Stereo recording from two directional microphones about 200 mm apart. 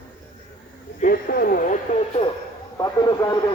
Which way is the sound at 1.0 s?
45° left (ahead or behind).